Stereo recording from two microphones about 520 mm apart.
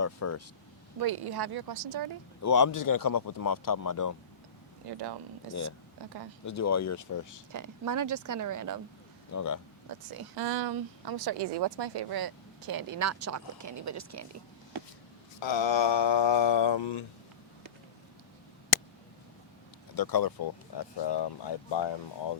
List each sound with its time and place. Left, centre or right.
0.0 s speech: left
0.9 s speech: right
2.4 s speech: left
4.9 s speech: right
6.4 s speech: left
7.5 s speech: right
9.3 s speech: left
10.1 s speech: right
15.4 s speech: left
20.0 s speech: left